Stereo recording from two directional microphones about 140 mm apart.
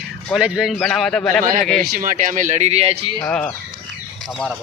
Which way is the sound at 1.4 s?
75° right (ahead or behind).